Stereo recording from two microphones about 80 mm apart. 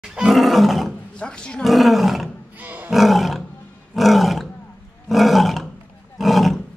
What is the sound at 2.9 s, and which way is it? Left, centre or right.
Roar, centre.